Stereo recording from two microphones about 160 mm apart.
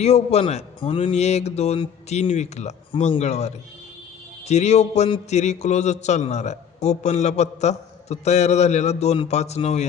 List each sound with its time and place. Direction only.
0.0 s a man's voice: 40° left (ahead or behind)
2.9 s speech: 35° left (ahead or behind)
3.2 s a man's voice: 45° left (ahead or behind)